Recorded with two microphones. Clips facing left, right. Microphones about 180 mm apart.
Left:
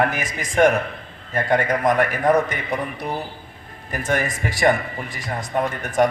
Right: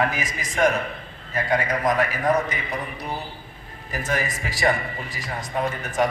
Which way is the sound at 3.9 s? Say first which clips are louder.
Left 3 dB; 55° left (ahead or behind).